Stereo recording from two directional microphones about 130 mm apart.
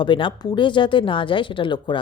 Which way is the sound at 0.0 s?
40° left (ahead or behind).